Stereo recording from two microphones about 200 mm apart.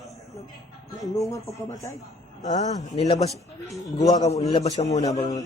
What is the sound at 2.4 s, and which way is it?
Speech, 35° left (ahead or behind).